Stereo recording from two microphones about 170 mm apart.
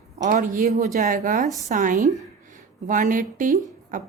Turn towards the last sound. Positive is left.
turn(degrees=-50)  # may be behind; listen again after turning